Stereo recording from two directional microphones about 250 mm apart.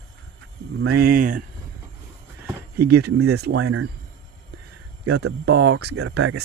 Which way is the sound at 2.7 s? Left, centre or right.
Right.